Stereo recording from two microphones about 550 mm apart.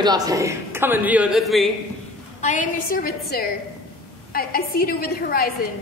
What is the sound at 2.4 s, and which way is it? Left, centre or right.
A woman's voice, centre.